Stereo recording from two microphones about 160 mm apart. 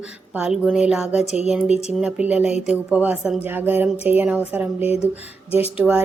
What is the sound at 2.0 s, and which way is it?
Speech, 10° right (ahead or behind).